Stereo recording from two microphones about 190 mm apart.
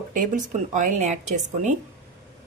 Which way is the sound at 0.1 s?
45° right (ahead or behind).